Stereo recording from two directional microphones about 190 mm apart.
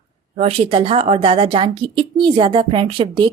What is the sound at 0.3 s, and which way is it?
A woman's voice, 30° right (ahead or behind).